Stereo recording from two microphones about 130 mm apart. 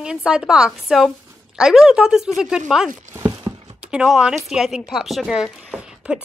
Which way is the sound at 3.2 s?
40° right (ahead or behind).